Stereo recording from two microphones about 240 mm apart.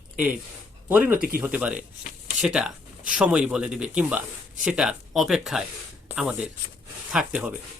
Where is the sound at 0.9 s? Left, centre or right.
Centre.